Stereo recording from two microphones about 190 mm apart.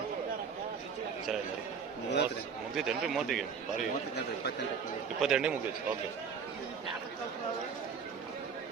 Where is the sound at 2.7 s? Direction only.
Centre (ahead or behind).